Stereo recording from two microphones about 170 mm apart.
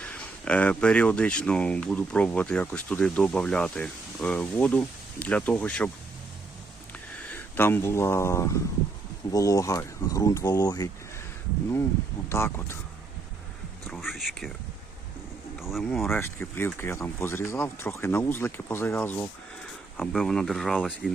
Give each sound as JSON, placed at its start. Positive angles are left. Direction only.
{"t": 0.0, "sound": "speech", "side_deg": 5}
{"t": 7.5, "sound": "speech", "side_deg": 15}
{"t": 12.3, "sound": "speech", "side_deg": 15}
{"t": 13.8, "sound": "a sound", "side_deg": 0}
{"t": 15.5, "sound": "speech", "side_deg": 0}
{"t": 20.0, "sound": "speech", "side_deg": 0}